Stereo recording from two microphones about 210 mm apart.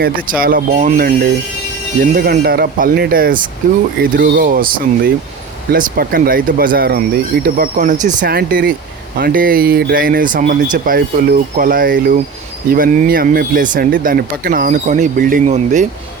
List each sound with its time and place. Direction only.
0.0 s speech: 45° right (ahead or behind)